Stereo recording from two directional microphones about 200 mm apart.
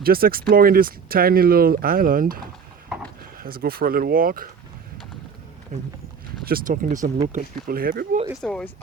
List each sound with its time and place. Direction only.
0.0 s speech: 50° right (ahead or behind)
3.4 s speech: 45° right (ahead or behind)
5.7 s speech: 40° right (ahead or behind)
8.4 s speech: 5° left (ahead or behind)